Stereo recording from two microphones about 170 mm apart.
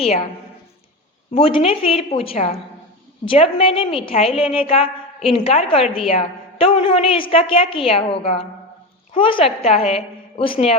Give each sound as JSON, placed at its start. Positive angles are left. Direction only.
{"t": 1.4, "sound": "a woman's voice", "side_deg": 30}